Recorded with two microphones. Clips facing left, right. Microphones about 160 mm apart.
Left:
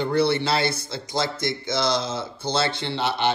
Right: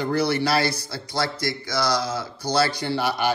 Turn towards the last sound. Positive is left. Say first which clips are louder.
# right 1 dB
turn(degrees=25)  # may be behind; listen again after turning